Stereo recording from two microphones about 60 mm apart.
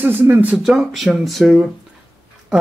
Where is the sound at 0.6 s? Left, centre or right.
Centre.